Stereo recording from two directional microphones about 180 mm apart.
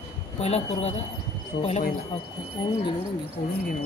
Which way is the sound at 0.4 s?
35° left (ahead or behind).